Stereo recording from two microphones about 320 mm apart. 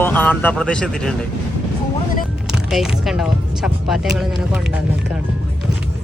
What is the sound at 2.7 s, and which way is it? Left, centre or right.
Speech, centre.